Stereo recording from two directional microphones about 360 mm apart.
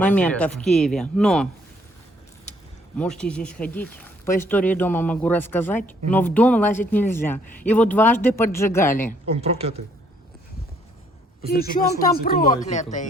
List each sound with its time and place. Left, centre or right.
0.0 s speech: centre
3.0 s speech: centre
9.3 s a woman's voice: centre
11.4 s speech: left